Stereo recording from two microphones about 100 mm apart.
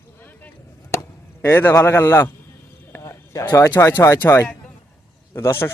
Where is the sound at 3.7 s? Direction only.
20° left (ahead or behind).